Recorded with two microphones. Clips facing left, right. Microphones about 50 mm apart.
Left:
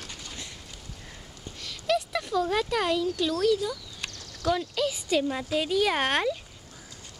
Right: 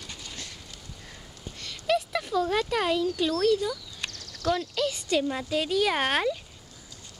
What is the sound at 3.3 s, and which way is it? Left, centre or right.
Speech, centre.